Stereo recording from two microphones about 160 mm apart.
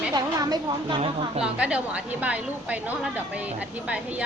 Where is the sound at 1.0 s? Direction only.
40° right (ahead or behind).